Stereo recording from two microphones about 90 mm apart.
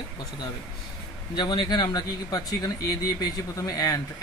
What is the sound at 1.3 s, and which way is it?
Speech, 60° left (ahead or behind).